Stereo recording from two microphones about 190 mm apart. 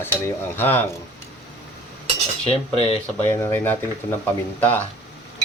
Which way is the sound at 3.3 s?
10° left (ahead or behind).